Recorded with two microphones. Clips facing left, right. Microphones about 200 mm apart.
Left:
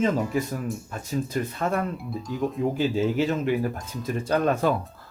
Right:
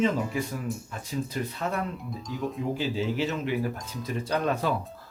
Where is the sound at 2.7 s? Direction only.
50° left (ahead or behind).